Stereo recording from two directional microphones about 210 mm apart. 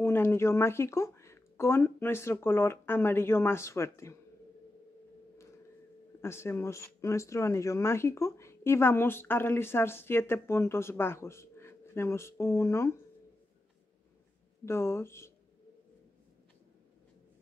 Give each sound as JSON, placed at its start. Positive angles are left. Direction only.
{"t": 0.0, "sound": "speech", "side_deg": 10}
{"t": 6.2, "sound": "speech", "side_deg": 10}
{"t": 14.6, "sound": "speech", "side_deg": 10}